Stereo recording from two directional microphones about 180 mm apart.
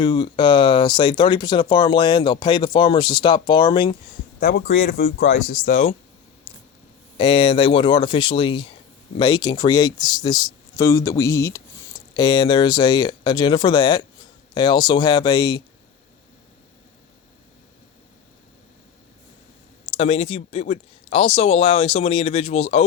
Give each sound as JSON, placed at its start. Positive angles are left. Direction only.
{"t": 0.0, "sound": "speech", "side_deg": 25}
{"t": 4.4, "sound": "speech", "side_deg": 60}
{"t": 4.9, "sound": "speech", "side_deg": 60}
{"t": 6.5, "sound": "a sound", "side_deg": 25}
{"t": 7.2, "sound": "speech", "side_deg": 30}
{"t": 19.8, "sound": "speech", "side_deg": 35}